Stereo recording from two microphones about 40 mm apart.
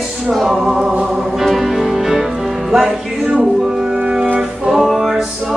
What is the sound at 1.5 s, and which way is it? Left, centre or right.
Music, centre.